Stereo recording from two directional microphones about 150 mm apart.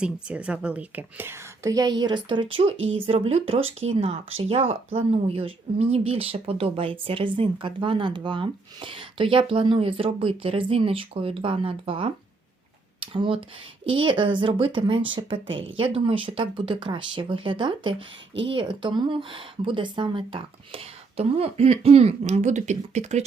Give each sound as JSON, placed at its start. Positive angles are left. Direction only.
{"t": 0.0, "sound": "a woman's voice", "side_deg": -5}